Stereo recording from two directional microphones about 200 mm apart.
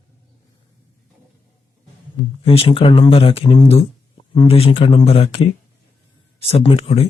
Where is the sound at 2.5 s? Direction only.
25° left (ahead or behind).